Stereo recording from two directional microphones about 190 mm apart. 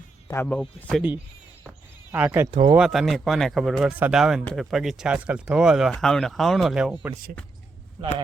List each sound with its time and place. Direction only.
0.3 s speech: 10° left (ahead or behind)
2.1 s speech: 10° right (ahead or behind)
2.5 s speech: 25° right (ahead or behind)
2.7 s speech: centre (ahead or behind)